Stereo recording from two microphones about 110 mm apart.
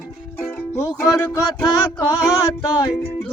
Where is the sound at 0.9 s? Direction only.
30° left (ahead or behind).